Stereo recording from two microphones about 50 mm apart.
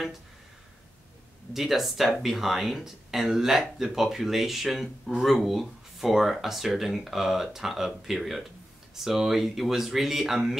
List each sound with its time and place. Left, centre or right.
1.5 s speech: centre